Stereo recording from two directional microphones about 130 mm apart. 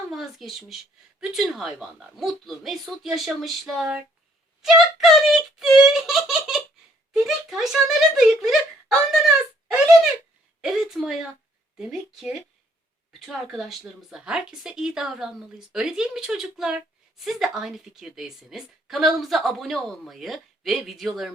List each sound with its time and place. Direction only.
0.1 s a woman's voice: centre (ahead or behind)